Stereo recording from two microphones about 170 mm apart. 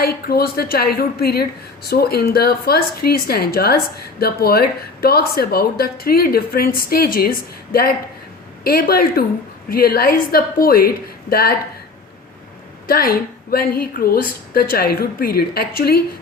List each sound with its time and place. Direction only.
0.0 s speech: 65° left (ahead or behind)
12.9 s speech: 60° left (ahead or behind)